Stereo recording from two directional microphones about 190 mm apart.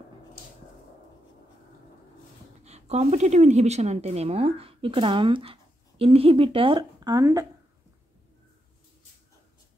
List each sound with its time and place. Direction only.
2.6 s a woman's voice: 35° right (ahead or behind); by 7.4 s 20° right (ahead or behind)